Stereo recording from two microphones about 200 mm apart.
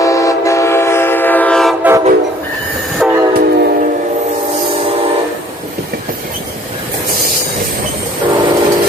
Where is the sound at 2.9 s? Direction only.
5° right (ahead or behind).